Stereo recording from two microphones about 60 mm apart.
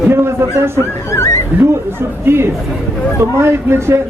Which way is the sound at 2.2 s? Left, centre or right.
Right.